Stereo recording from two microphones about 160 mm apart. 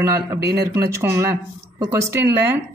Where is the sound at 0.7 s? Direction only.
20° right (ahead or behind).